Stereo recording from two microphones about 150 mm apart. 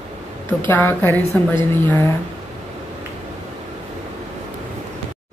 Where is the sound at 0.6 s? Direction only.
15° left (ahead or behind).